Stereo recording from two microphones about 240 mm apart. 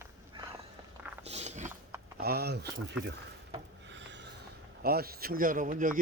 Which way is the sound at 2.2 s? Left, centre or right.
Right.